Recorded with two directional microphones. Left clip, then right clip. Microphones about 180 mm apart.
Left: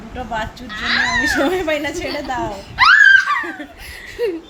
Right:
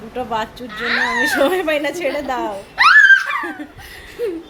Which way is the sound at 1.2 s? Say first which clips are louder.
Right 1 dB; 40° right (ahead or behind).